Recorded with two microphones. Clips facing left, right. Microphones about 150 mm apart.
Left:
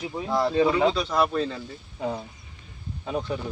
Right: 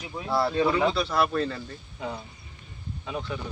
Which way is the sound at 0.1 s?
15° left (ahead or behind).